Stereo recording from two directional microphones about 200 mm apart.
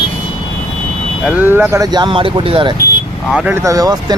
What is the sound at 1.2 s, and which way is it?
Speech, 10° right (ahead or behind).